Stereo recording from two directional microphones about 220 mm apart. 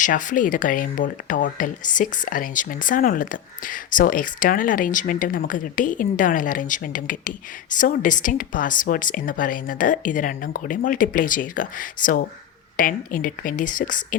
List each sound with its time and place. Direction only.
0.0 s speech: 35° left (ahead or behind)